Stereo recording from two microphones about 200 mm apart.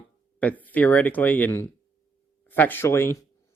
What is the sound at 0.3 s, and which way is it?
Speech, 5° left (ahead or behind).